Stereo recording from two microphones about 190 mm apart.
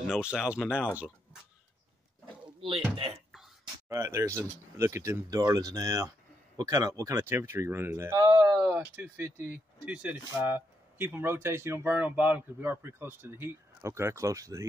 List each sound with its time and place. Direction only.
0.0 s speech: 5° right (ahead or behind)
3.9 s speech: 15° right (ahead or behind)